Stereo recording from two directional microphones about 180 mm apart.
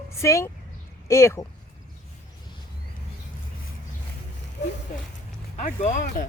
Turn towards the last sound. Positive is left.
turn(degrees=45)  # may be behind; listen again after turning